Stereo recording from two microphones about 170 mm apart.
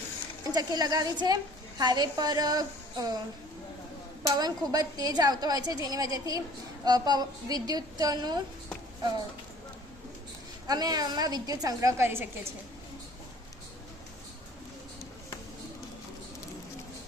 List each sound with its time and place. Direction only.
0.5 s a woman's voice: 25° right (ahead or behind)
4.4 s a woman's voice: 25° right (ahead or behind)
10.7 s a woman's voice: 25° right (ahead or behind)